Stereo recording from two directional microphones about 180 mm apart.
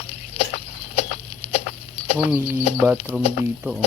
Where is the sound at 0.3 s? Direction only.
35° left (ahead or behind).